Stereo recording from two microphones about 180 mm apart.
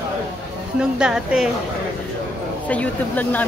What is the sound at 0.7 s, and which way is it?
Speech, 5° right (ahead or behind).